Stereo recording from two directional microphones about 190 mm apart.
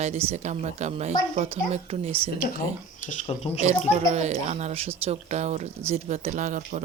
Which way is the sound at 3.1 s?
30° left (ahead or behind).